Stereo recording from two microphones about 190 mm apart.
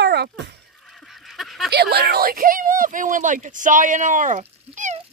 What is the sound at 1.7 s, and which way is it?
Speech, 55° right (ahead or behind).